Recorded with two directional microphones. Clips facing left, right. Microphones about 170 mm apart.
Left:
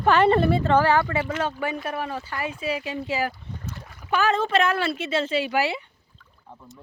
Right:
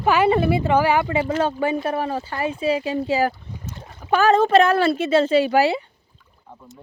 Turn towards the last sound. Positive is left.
turn(degrees=-35)  # may be behind; listen again after turning